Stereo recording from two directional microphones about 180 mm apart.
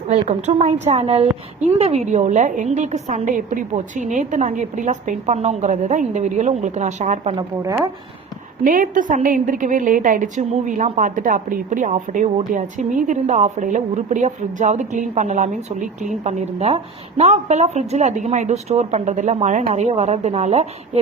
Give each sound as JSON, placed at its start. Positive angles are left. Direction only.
{"t": 0.1, "sound": "a woman's voice", "side_deg": -40}
{"t": 7.3, "sound": "speech", "side_deg": -15}
{"t": 8.6, "sound": "a woman's voice", "side_deg": -50}